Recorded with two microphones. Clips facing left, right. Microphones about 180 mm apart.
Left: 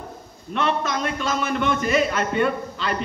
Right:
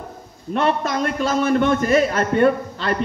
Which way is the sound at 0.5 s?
40° right (ahead or behind).